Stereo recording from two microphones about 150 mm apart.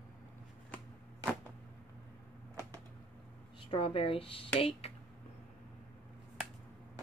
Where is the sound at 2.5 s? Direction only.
20° right (ahead or behind).